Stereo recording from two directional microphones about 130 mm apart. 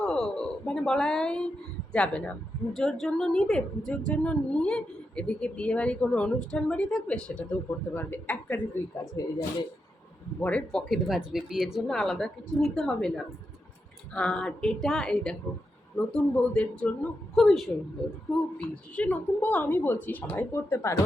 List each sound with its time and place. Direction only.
0.0 s a woman's voice: 5° left (ahead or behind)
9.2 s speech: 25° left (ahead or behind)
10.4 s a woman's voice: 10° left (ahead or behind)
18.7 s a woman's voice: 10° left (ahead or behind)